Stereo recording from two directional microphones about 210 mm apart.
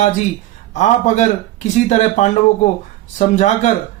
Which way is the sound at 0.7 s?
35° left (ahead or behind).